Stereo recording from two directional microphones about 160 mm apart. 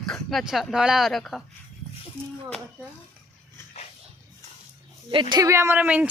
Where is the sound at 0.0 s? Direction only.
5° left (ahead or behind).